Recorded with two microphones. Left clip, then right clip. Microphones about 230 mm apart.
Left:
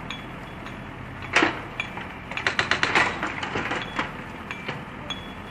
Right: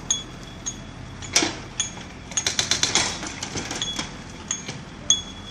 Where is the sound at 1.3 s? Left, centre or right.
Right.